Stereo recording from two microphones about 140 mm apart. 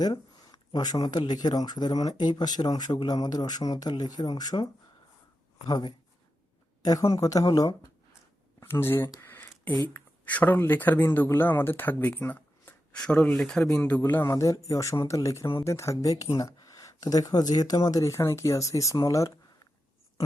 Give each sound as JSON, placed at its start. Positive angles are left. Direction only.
{"t": 0.0, "sound": "speech", "side_deg": 25}
{"t": 8.6, "sound": "speech", "side_deg": 15}
{"t": 9.2, "sound": "a sound", "side_deg": 15}
{"t": 9.9, "sound": "speech", "side_deg": 10}